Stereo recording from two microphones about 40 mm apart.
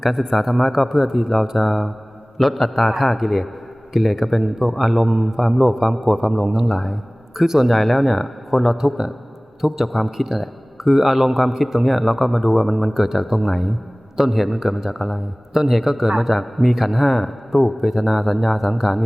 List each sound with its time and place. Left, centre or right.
0.0 s a man's voice: centre
5.0 s a man's voice: right
5.4 s a man's voice: centre